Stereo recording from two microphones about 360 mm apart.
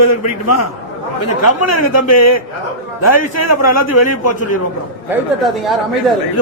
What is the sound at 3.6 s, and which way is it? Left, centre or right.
Speech, left.